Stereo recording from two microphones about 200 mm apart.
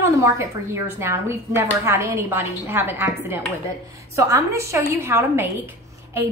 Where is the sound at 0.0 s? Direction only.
15° right (ahead or behind).